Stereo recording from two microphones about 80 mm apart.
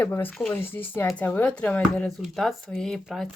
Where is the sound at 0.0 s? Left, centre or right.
Left.